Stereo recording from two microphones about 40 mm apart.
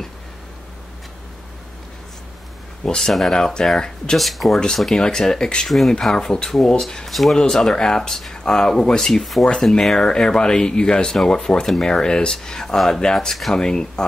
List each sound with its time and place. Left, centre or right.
3.0 s speech: centre
3.5 s speech: centre
4.2 s speech: centre
5.7 s speech: centre
5.9 s speech: centre
7.1 s speech: centre
7.3 s speech: centre
9.1 s speech: centre
9.9 s speech: centre
11.1 s speech: centre